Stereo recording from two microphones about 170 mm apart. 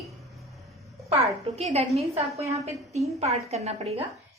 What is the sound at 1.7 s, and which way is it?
A woman's voice, 35° right (ahead or behind).